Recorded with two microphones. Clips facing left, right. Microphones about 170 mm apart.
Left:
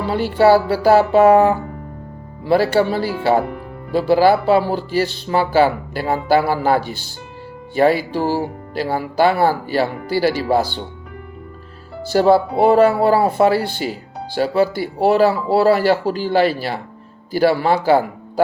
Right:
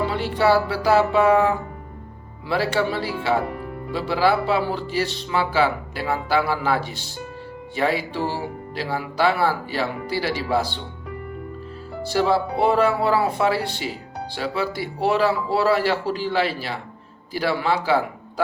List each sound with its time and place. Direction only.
0.1 s speech: 45° left (ahead or behind)
7.8 s speech: 45° left (ahead or behind)
12.1 s speech: 45° left (ahead or behind)